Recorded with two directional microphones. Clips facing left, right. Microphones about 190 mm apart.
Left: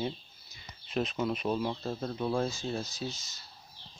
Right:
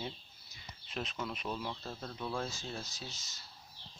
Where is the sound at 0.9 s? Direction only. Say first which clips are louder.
Left 9 dB; 45° left (ahead or behind).